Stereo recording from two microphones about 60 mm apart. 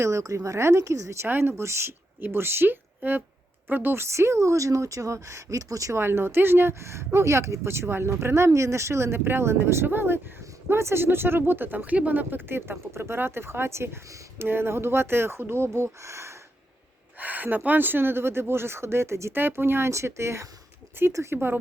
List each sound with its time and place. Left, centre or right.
0.0 s speech: right
1.3 s speech: right
4.1 s speech: right
6.0 s speech: right
15.7 s speech: right
17.2 s speech: right
19.4 s speech: right